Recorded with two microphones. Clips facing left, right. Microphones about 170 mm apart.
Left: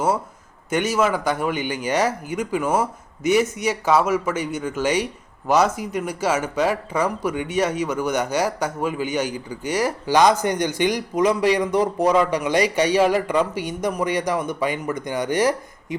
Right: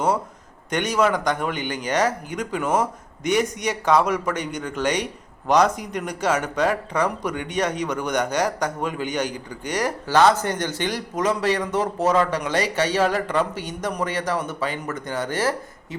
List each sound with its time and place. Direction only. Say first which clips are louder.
0.7 s speech: left 1 dB; 5° left (ahead or behind)